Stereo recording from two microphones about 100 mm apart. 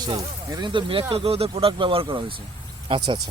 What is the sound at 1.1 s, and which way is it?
Speech, 75° right (ahead or behind).